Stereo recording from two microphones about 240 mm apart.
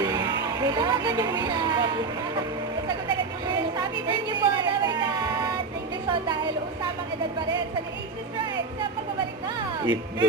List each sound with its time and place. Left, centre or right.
0.0 s vehicle: centre
3.5 s a sound: centre
6.1 s a woman's voice: centre
9.8 s speech: centre